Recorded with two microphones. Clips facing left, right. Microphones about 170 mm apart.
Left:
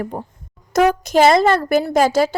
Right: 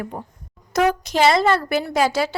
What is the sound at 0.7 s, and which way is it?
Speech, 50° left (ahead or behind).